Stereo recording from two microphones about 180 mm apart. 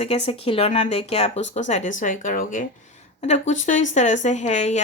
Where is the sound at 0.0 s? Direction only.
35° left (ahead or behind).